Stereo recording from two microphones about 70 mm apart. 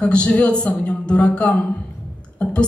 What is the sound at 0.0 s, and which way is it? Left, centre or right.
Speech, centre.